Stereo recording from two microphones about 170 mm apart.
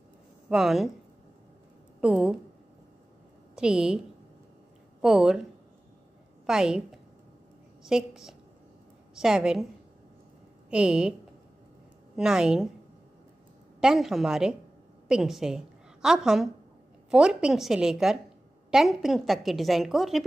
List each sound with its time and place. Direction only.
0.5 s a woman's voice: centre (ahead or behind)
2.0 s a woman's voice: 5° right (ahead or behind)
3.5 s a woman's voice: 5° right (ahead or behind)
5.0 s a woman's voice: 5° right (ahead or behind)
6.4 s a woman's voice: 5° right (ahead or behind)
10.7 s a woman's voice: 5° right (ahead or behind)
12.2 s a woman's voice: 5° right (ahead or behind)
13.7 s a woman's voice: centre (ahead or behind)